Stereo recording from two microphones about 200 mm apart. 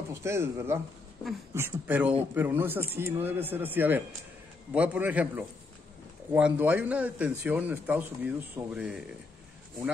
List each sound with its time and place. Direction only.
0.1 s a man's voice: 15° right (ahead or behind)